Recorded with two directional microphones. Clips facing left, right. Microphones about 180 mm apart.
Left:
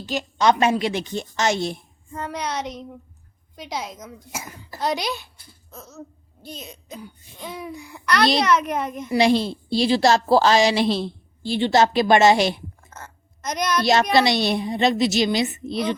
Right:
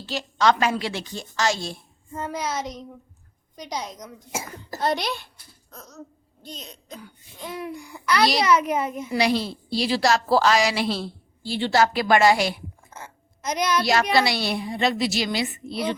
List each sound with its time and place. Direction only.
0.0 s a woman's voice: 15° left (ahead or behind)
2.1 s a child's voice: 5° right (ahead or behind)
5.7 s hiccup: 5° left (ahead or behind)
6.4 s speech: 10° left (ahead or behind)
7.4 s a child's voice: centre (ahead or behind)
9.1 s a woman's voice: 25° left (ahead or behind)
12.9 s a sound: 10° right (ahead or behind)
13.8 s a woman's voice: 25° left (ahead or behind)